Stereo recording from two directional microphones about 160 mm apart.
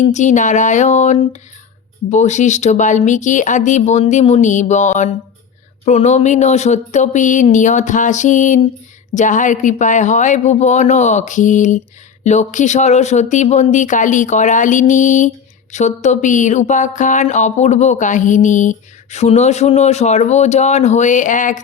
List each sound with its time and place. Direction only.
0.1 s speech: 50° left (ahead or behind)